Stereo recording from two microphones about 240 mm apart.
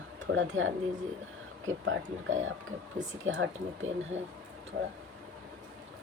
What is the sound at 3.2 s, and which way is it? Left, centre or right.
Speech, right.